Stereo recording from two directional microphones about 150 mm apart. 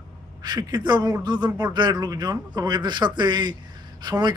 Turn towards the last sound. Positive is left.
turn(degrees=-30)  # may be behind; listen again after turning